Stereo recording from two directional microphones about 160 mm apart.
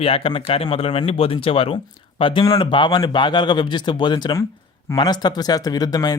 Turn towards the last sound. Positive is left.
turn(degrees=25)  # may be behind; listen again after turning